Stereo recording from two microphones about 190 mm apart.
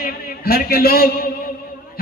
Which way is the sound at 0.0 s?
50° left (ahead or behind).